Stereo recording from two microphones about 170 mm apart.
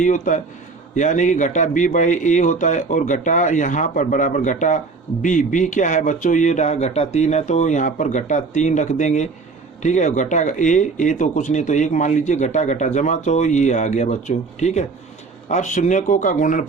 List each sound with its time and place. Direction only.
0.0 s speech: 45° left (ahead or behind)